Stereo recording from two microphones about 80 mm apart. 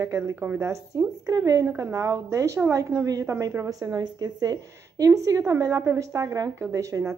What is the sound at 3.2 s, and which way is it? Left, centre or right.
A woman's voice, right.